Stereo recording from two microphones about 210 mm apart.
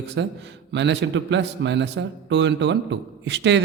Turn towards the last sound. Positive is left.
turn(degrees=-55)  # may be behind; listen again after turning